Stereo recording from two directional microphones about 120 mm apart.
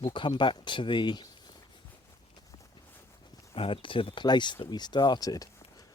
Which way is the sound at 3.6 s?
50° left (ahead or behind).